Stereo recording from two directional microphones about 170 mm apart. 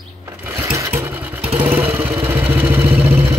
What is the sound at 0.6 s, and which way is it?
Vehicle, 15° right (ahead or behind).